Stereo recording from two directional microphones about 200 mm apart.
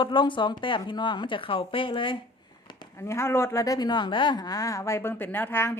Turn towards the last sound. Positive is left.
turn(degrees=10)  # may be behind; listen again after turning